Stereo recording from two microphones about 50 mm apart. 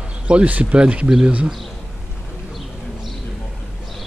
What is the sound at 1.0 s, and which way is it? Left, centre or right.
Speech, centre.